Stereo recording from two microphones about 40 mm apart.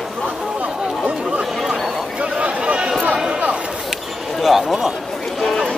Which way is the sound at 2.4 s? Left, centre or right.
Right.